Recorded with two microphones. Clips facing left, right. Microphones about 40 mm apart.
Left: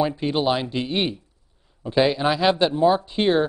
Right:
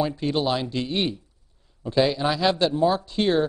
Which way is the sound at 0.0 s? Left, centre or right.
Centre.